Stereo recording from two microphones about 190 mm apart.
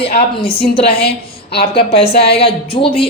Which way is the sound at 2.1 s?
55° left (ahead or behind).